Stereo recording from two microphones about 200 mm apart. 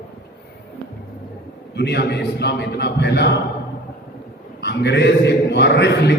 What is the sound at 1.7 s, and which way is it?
A man's voice, 55° left (ahead or behind).